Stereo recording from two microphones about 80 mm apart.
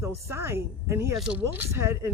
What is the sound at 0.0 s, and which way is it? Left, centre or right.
Speech, right.